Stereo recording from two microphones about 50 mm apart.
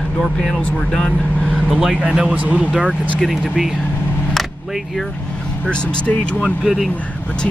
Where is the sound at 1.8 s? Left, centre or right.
Centre.